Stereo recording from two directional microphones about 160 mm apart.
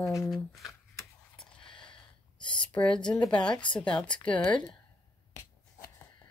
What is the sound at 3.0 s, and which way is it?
Speech, 5° left (ahead or behind).